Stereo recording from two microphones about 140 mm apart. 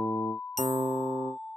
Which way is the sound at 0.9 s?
45° left (ahead or behind).